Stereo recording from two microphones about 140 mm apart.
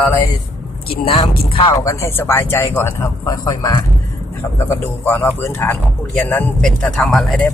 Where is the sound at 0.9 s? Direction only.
40° left (ahead or behind).